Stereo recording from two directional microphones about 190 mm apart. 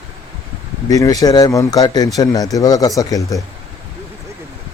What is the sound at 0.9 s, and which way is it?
Speech, 20° left (ahead or behind).